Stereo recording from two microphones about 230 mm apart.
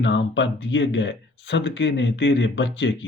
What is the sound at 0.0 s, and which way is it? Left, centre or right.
Speech, left.